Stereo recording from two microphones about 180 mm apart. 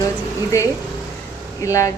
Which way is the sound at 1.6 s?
15° left (ahead or behind).